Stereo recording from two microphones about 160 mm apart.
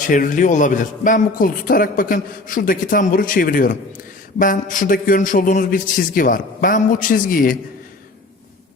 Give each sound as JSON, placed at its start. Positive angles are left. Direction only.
{"t": 0.1, "sound": "a man's voice", "side_deg": 55}